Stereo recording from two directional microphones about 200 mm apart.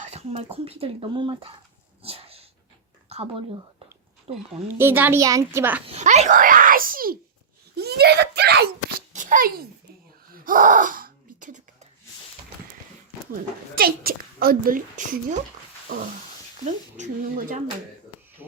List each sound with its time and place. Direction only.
0.1 s a sound: 30° right (ahead or behind)
0.5 s speech: 30° right (ahead or behind)
2.0 s dog: 30° right (ahead or behind)
3.1 s a woman's voice: 30° right (ahead or behind)
4.8 s a child's voice: 10° right (ahead or behind)
5.8 s speech: 35° right (ahead or behind)
7.8 s a sound: 55° right (ahead or behind)
10.3 s wail: 45° right (ahead or behind)
13.3 s a woman's voice: 50° right (ahead or behind)